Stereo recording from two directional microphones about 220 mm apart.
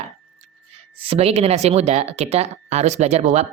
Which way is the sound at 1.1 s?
25° right (ahead or behind).